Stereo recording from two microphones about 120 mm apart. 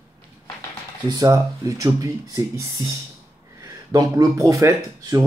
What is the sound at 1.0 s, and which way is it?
Speech, 35° right (ahead or behind).